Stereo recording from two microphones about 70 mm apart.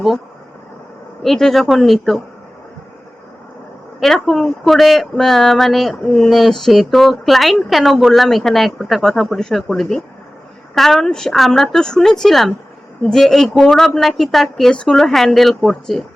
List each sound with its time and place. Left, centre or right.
1.2 s speech: centre
4.0 s speech: centre